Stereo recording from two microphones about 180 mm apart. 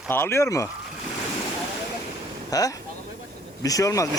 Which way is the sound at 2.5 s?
20° left (ahead or behind).